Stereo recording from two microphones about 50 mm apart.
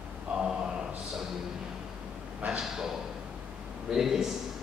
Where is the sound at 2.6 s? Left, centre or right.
Centre.